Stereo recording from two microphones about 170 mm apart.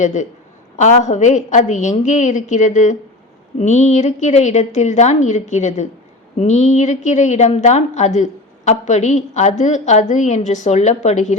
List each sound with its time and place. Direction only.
0.0 s a woman's voice: 45° left (ahead or behind)